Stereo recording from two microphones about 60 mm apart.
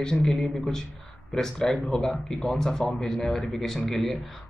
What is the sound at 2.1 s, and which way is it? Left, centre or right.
Speech, left.